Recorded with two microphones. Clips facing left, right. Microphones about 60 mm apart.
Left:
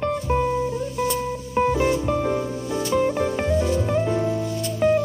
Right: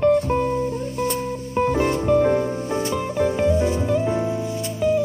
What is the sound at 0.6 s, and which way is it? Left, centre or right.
Music, right.